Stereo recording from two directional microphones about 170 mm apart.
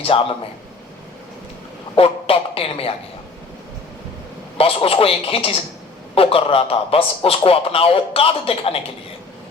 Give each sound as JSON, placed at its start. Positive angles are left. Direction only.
{"t": 0.0, "sound": "a man's voice", "side_deg": 35}
{"t": 2.0, "sound": "a man's voice", "side_deg": 35}
{"t": 4.5, "sound": "a man's voice", "side_deg": 35}